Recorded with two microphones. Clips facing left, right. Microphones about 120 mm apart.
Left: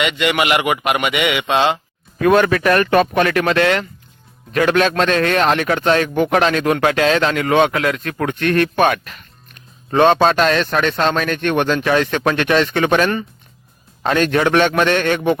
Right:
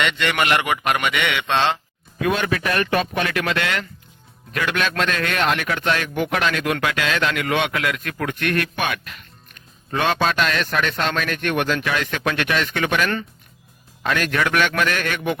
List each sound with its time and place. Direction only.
0.0 s a man's voice: 10° left (ahead or behind)
2.2 s speech: 50° left (ahead or behind); by 15.4 s 30° left (ahead or behind)